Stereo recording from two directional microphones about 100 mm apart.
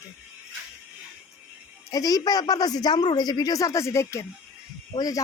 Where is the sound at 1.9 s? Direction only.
40° left (ahead or behind).